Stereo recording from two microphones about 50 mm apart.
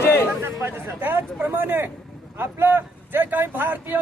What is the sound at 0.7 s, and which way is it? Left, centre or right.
Speech, right.